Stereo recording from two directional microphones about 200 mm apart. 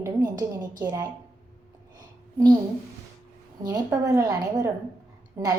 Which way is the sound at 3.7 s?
15° right (ahead or behind).